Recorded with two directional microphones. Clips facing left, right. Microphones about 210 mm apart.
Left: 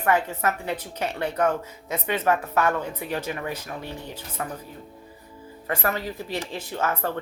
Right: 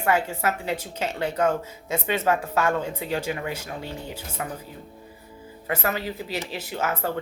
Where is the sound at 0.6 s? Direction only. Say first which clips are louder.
Right 1 dB; 25° right (ahead or behind).